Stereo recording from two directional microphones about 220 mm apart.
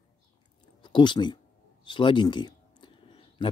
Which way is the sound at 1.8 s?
20° left (ahead or behind).